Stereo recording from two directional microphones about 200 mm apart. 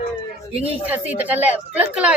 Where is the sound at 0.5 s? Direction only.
30° right (ahead or behind).